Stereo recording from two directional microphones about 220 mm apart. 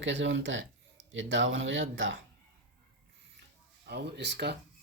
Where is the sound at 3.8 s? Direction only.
50° right (ahead or behind).